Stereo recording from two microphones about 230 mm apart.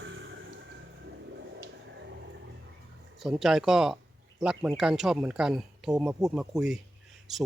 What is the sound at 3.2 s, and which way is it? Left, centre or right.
Speech, centre.